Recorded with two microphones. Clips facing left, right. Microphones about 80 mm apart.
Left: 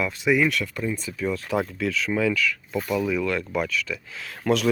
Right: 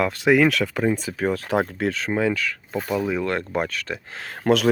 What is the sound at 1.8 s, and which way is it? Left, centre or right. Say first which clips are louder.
Speech: right 1 dB; right.